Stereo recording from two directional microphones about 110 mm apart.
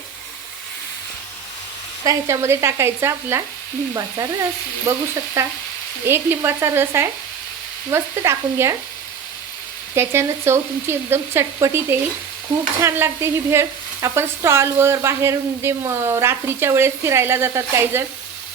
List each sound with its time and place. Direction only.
2.0 s sizzle: 25° right (ahead or behind)
3.9 s frying: 30° right (ahead or behind)
4.9 s sizzle: 30° right (ahead or behind)
9.9 s sizzle: 25° right (ahead or behind)